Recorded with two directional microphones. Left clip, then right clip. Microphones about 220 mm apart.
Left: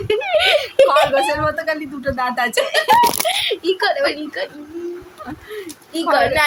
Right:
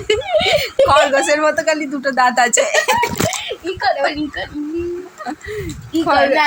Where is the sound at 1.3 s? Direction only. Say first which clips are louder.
Right 5 dB; 10° right (ahead or behind).